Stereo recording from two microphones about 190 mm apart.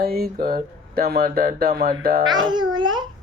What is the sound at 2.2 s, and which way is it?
Speech, 25° right (ahead or behind).